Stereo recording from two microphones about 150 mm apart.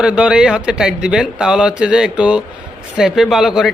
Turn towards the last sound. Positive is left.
turn(degrees=-5)  # may be behind; listen again after turning